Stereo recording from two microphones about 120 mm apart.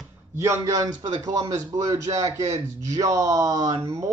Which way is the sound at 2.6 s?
30° right (ahead or behind).